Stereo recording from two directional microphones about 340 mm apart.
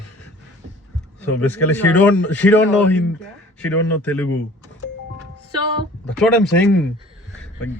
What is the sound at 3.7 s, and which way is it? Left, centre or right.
Speech, left.